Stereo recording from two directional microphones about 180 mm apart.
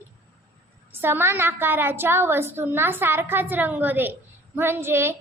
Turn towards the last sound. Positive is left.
turn(degrees=-15)  # may be behind; listen again after turning